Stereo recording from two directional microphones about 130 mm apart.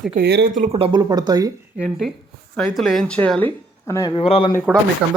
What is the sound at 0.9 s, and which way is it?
Speech, 30° right (ahead or behind).